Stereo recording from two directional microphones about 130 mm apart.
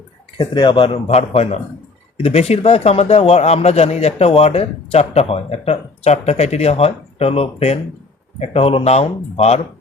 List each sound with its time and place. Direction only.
0.3 s a man's voice: 40° left (ahead or behind)